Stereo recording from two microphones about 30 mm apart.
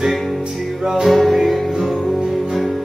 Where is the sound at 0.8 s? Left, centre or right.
Centre.